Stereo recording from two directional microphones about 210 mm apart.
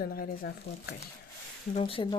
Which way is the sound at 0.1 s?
45° left (ahead or behind).